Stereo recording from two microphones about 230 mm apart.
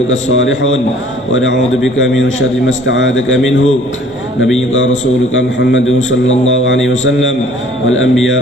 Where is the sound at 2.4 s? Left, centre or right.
Left.